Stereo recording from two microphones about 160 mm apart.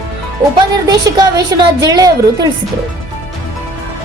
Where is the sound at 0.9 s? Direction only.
25° right (ahead or behind).